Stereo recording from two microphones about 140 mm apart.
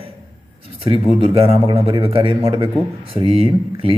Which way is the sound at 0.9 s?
40° right (ahead or behind).